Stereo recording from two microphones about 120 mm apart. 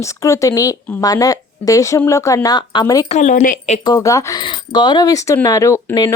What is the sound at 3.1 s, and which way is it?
Speech, 80° left.